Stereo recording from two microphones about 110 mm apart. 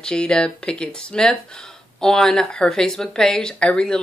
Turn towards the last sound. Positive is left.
turn(degrees=10)  # may be behind; listen again after turning